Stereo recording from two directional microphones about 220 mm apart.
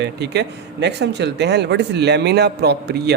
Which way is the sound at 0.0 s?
50° right (ahead or behind).